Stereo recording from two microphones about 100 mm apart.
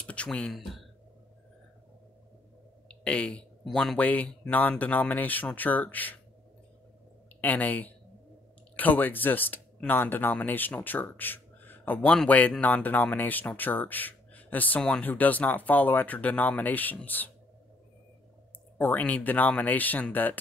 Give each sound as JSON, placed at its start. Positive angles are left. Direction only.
{"t": 0.0, "sound": "typing", "side_deg": 10}
{"t": 2.9, "sound": "speech", "side_deg": 10}
{"t": 7.4, "sound": "speech", "side_deg": 15}
{"t": 18.8, "sound": "speech", "side_deg": 15}